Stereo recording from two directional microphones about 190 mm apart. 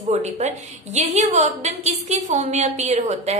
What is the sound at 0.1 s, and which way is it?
A woman's voice, 35° right (ahead or behind).